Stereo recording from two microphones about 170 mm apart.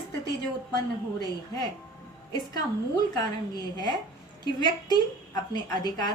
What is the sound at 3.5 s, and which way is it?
A woman's voice, 25° left (ahead or behind).